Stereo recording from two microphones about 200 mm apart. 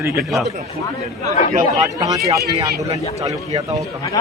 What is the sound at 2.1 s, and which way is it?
Speech, 15° right (ahead or behind).